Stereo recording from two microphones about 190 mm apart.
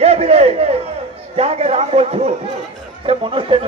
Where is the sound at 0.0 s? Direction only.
35° right (ahead or behind).